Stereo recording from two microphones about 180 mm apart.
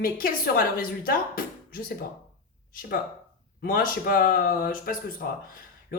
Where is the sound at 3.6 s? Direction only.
55° left (ahead or behind).